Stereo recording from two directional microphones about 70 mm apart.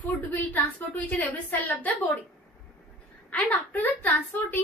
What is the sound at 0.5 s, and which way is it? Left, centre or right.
A woman's voice, left.